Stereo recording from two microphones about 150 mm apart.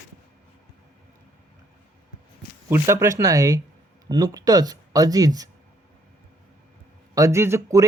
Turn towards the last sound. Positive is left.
turn(degrees=-20)  # may be behind; listen again after turning